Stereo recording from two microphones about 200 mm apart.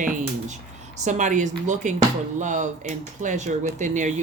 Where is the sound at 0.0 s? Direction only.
35° right (ahead or behind).